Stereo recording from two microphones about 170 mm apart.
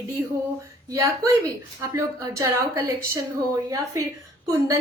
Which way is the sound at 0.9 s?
20° right (ahead or behind).